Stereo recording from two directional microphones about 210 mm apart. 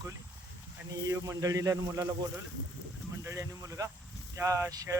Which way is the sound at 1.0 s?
15° right (ahead or behind).